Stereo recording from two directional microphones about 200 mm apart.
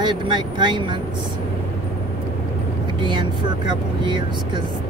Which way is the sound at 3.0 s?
25° right (ahead or behind).